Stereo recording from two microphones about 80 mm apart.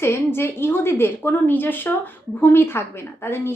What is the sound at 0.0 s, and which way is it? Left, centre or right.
A woman's voice, left.